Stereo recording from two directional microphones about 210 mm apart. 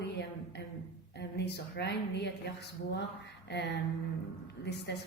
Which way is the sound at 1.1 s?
50° left (ahead or behind).